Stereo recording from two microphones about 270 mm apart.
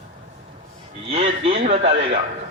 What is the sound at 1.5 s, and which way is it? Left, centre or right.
Speech, right.